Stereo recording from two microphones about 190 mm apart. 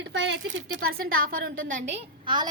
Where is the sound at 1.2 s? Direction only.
50° right (ahead or behind).